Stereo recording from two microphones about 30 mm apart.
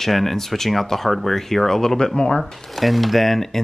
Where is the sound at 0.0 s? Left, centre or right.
Centre.